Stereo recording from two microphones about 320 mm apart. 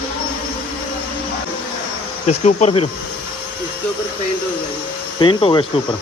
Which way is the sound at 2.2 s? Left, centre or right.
Left.